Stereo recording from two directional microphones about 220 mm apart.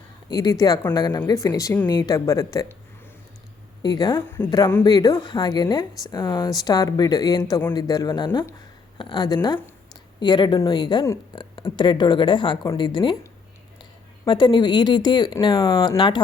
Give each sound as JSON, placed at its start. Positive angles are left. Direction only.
{"t": 0.3, "sound": "speech", "side_deg": 20}
{"t": 3.8, "sound": "speech", "side_deg": 20}
{"t": 14.3, "sound": "speech", "side_deg": 20}